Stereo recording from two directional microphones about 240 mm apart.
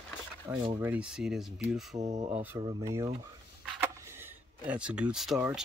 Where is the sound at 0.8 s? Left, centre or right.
Centre.